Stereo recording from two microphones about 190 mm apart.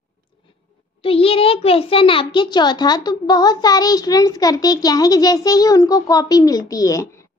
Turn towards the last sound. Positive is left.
turn(degrees=20)  # may be behind; listen again after turning